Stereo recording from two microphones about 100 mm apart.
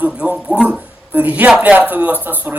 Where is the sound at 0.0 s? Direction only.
10° right (ahead or behind).